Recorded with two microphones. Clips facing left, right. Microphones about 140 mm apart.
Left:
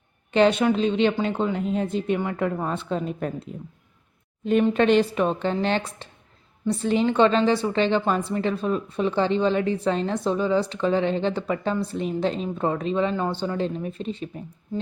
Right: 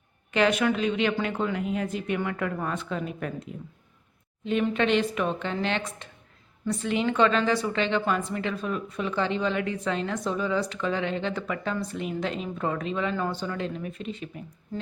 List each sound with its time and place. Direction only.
0.3 s a woman's voice: 30° left (ahead or behind)
4.6 s a woman's voice: 40° left (ahead or behind)